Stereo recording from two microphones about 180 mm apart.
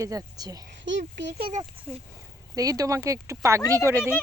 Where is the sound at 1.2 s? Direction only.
75° right (ahead or behind).